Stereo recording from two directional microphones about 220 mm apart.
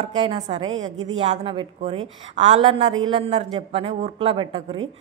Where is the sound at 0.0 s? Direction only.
25° right (ahead or behind).